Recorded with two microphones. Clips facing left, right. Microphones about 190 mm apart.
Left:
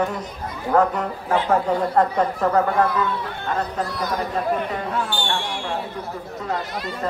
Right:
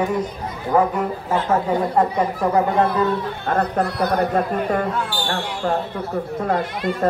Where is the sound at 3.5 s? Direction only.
60° right (ahead or behind).